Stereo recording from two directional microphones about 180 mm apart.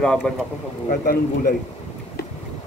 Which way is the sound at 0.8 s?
55° left (ahead or behind).